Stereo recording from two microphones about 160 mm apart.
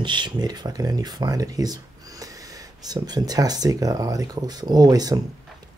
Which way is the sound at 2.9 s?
25° right (ahead or behind).